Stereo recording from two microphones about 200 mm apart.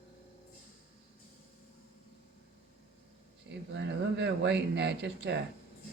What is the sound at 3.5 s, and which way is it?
Speech, 60° right (ahead or behind).